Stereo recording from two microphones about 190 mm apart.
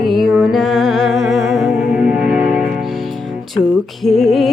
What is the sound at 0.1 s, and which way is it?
Music, centre (ahead or behind).